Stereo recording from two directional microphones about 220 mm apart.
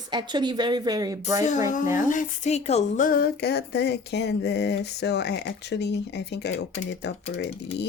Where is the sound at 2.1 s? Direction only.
35° left (ahead or behind).